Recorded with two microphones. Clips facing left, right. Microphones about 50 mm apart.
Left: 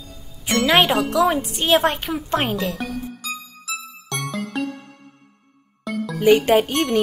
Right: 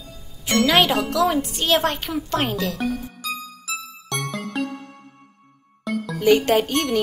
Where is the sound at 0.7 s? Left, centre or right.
Centre.